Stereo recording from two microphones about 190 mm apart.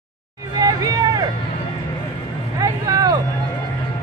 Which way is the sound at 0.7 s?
20° right (ahead or behind).